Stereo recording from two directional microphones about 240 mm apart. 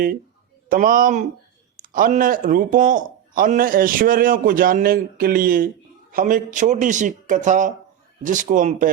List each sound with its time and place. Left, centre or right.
0.7 s speech: right